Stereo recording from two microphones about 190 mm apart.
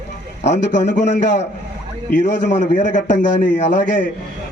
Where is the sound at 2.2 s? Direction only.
40° left (ahead or behind).